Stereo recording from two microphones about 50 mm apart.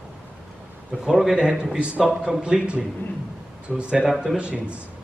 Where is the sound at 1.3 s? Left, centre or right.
Centre.